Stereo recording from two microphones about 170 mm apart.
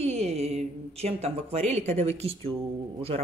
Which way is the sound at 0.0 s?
40° right (ahead or behind).